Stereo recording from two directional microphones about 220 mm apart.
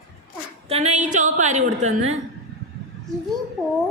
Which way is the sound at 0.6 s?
30° right (ahead or behind).